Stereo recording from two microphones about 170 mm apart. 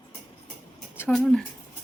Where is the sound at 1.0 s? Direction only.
5° left (ahead or behind).